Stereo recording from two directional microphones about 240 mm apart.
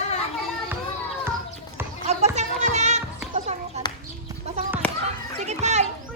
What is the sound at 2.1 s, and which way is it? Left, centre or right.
Music, right.